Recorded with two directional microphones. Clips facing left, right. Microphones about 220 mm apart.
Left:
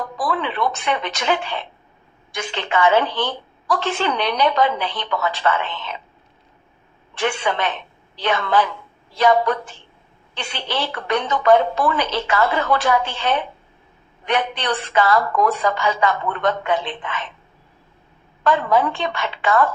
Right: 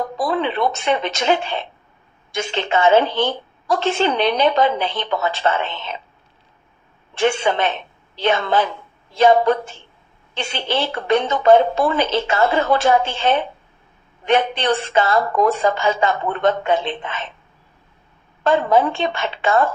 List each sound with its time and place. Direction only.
0.0 s a woman's voice: 25° right (ahead or behind)
7.1 s a woman's voice: 25° right (ahead or behind)
18.4 s a woman's voice: 25° right (ahead or behind)